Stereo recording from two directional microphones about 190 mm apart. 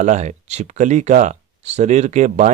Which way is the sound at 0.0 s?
40° right (ahead or behind).